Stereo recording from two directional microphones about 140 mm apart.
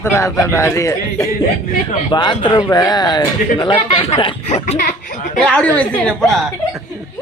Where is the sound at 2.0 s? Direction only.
35° left (ahead or behind).